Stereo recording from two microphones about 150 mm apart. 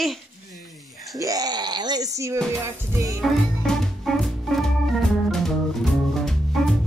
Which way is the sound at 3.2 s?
Centre (ahead or behind).